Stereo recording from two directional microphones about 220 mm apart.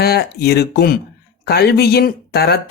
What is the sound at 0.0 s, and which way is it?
Speech, 45° left (ahead or behind).